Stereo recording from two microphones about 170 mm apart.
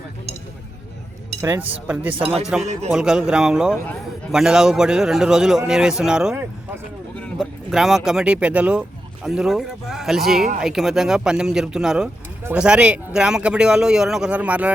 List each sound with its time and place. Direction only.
1.4 s a man's voice: 15° right (ahead or behind)